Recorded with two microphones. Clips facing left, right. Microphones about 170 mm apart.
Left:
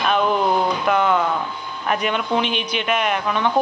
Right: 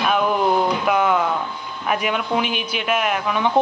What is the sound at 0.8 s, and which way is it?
A man's voice, 5° right (ahead or behind).